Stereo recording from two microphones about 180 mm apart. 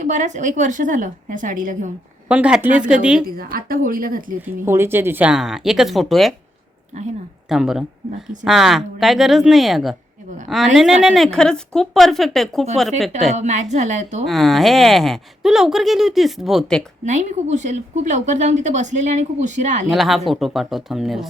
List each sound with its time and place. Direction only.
0.0 s a woman's voice: 40° right (ahead or behind)
2.2 s speech: 10° right (ahead or behind)
3.2 s a woman's voice: 55° right (ahead or behind)
4.4 s speech: 10° right (ahead or behind)
6.9 s a woman's voice: 40° right (ahead or behind)
7.4 s speech: centre (ahead or behind)
13.3 s a woman's voice: 40° right (ahead or behind)
14.3 s speech: centre (ahead or behind)
17.1 s a woman's voice: 40° right (ahead or behind)
19.9 s speech: centre (ahead or behind)